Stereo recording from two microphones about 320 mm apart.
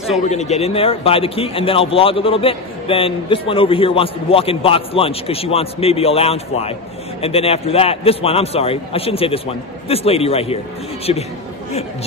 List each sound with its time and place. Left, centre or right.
0.2 s a man's voice: left